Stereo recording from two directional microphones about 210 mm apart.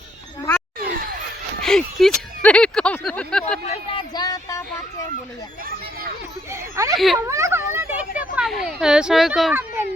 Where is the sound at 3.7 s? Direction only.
20° left (ahead or behind).